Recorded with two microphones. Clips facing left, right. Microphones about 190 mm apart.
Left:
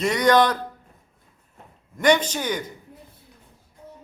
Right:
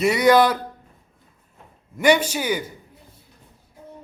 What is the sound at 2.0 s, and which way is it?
Speech, 10° right (ahead or behind).